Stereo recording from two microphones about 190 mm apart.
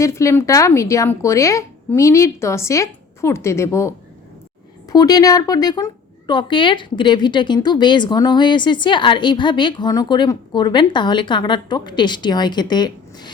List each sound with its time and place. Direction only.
0.0 s a woman's voice: 15° left (ahead or behind)